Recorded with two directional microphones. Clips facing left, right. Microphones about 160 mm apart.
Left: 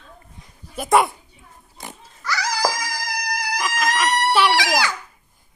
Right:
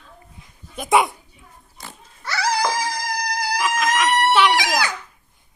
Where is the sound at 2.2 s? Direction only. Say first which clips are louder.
Right 2 dB; 25° right (ahead or behind).